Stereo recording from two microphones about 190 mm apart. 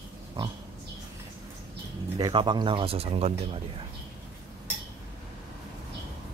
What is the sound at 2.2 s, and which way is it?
Speech, 20° right (ahead or behind).